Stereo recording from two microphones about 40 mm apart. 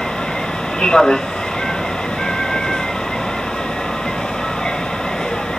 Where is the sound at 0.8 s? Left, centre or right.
Centre.